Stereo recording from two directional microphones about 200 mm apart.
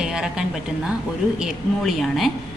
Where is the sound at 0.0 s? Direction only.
5° right (ahead or behind).